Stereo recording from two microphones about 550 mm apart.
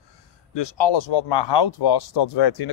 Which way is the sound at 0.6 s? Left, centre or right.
Left.